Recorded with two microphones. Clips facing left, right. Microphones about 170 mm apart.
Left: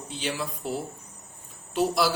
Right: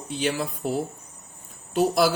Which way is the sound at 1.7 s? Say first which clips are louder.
Right 3 dB; 50° right (ahead or behind).